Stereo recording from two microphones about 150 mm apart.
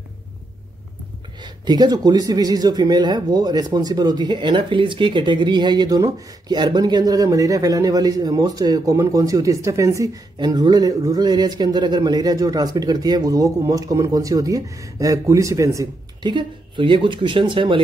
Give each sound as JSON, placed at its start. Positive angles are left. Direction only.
{"t": 1.4, "sound": "speech", "side_deg": -30}